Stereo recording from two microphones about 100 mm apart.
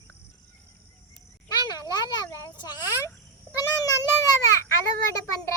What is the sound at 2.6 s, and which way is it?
Speech, 45° left (ahead or behind).